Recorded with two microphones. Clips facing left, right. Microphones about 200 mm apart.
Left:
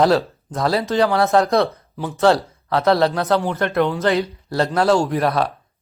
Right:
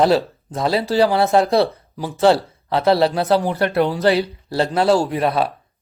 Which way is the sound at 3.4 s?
15° right (ahead or behind).